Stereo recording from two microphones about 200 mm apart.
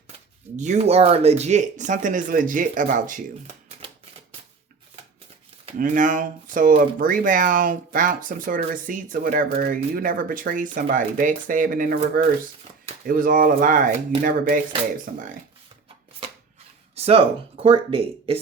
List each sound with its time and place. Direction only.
0.5 s speech: 35° right (ahead or behind)
5.6 s speech: 40° right (ahead or behind)
16.9 s speech: 30° right (ahead or behind)